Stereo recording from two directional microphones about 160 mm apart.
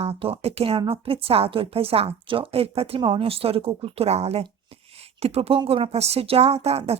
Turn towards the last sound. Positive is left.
turn(degrees=-40)  # may be behind; listen again after turning